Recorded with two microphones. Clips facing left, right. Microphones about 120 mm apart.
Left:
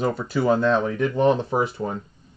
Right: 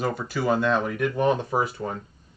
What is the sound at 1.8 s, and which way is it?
Speech, 20° left (ahead or behind).